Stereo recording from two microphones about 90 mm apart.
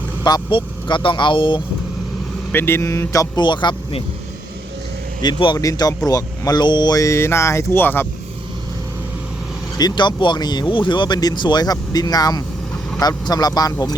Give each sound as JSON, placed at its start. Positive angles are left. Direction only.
{"t": 0.5, "sound": "speech", "side_deg": 65}
{"t": 2.5, "sound": "speech", "side_deg": 25}
{"t": 3.4, "sound": "speech", "side_deg": 60}
{"t": 5.2, "sound": "speech", "side_deg": 60}
{"t": 5.5, "sound": "speech", "side_deg": 45}
{"t": 7.0, "sound": "speech", "side_deg": 30}
{"t": 9.7, "sound": "speech", "side_deg": 55}